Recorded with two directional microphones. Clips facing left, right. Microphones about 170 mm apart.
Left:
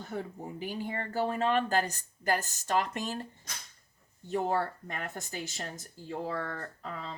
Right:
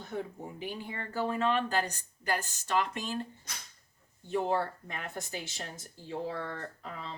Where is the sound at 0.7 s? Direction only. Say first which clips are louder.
Left 4 dB; 40° left (ahead or behind).